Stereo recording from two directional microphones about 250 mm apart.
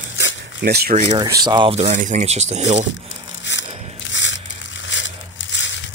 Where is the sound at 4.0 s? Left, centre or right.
Left.